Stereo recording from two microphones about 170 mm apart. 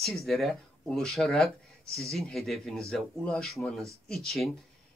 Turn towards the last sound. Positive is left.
turn(degrees=0)  # may be behind; listen again after turning